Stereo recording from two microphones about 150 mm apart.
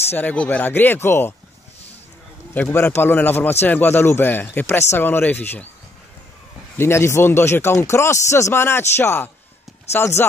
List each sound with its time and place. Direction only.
0.1 s speech: 10° left (ahead or behind)
2.5 s speech: 15° left (ahead or behind)
6.8 s speech: 15° left (ahead or behind)